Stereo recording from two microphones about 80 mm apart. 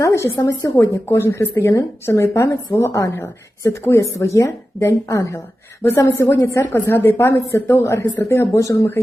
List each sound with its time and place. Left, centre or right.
0.0 s a woman's voice: left